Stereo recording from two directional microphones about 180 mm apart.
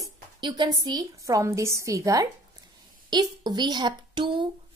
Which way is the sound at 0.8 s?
20° right (ahead or behind).